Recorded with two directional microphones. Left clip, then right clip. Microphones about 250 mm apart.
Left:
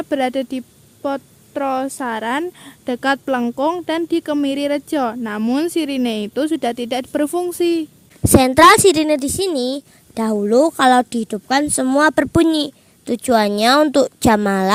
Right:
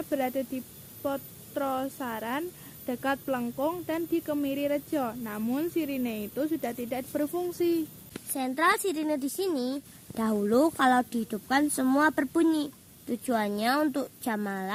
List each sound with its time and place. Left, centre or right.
0.0 s a woman's voice: left